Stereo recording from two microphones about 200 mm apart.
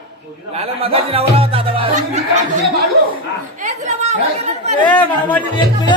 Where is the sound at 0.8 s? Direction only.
30° right (ahead or behind).